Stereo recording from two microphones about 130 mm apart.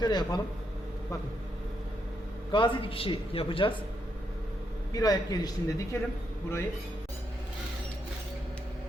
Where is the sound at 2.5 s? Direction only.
40° left (ahead or behind).